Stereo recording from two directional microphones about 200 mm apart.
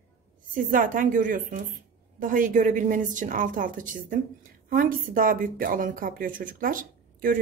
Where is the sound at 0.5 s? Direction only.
45° right (ahead or behind).